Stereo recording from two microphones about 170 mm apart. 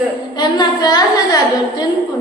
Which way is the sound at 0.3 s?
25° left (ahead or behind).